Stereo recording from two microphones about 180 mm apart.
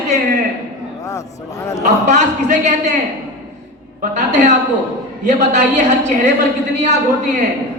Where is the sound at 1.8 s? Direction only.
40° right (ahead or behind).